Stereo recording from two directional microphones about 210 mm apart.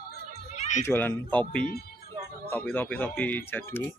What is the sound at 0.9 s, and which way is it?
Speech, 10° left (ahead or behind).